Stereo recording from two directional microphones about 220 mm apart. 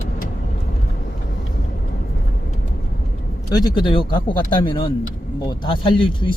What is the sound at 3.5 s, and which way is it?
Speech, 20° left (ahead or behind).